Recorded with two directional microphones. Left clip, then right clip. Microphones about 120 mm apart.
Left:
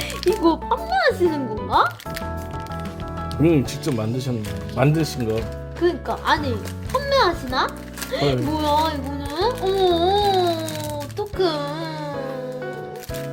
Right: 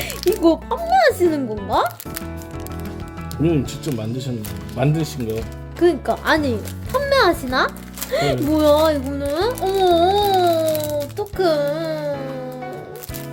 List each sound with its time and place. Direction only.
0.4 s a child's voice: 35° right (ahead or behind)
3.4 s speech: 5° left (ahead or behind)
5.8 s speech: 70° right (ahead or behind); by 12.0 s 40° right (ahead or behind)